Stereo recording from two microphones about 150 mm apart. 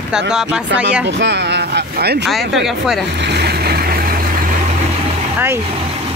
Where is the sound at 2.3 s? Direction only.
Centre (ahead or behind).